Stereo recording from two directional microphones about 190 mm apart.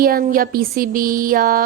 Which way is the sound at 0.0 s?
50° right (ahead or behind).